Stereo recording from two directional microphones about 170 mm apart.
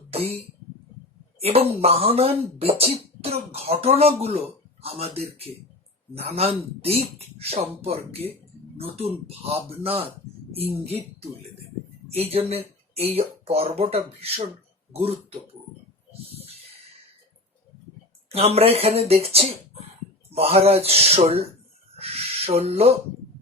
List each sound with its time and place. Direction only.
0.1 s speech: 35° right (ahead or behind)
12.3 s speech: 35° right (ahead or behind)
18.3 s speech: 35° right (ahead or behind)